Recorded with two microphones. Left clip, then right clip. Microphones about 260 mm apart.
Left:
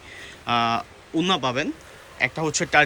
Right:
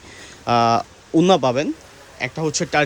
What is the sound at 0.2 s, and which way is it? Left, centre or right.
Speech, right.